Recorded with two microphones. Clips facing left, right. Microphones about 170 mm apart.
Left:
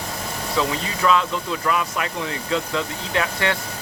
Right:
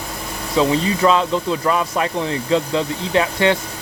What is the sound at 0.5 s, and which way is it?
Speech, 30° right (ahead or behind).